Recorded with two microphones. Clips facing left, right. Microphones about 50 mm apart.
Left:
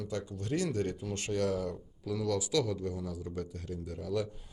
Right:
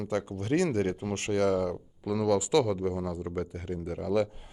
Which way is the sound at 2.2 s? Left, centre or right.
Right.